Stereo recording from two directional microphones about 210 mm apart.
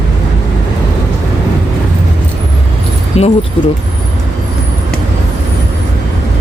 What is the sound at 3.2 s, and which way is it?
Speech, 30° left (ahead or behind).